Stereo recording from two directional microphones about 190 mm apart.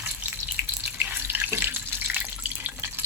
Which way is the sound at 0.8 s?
10° right (ahead or behind).